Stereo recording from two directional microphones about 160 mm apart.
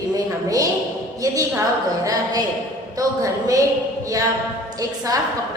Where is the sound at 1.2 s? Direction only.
20° right (ahead or behind).